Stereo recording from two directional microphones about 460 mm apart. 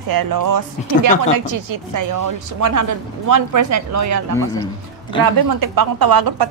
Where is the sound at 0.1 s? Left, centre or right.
Right.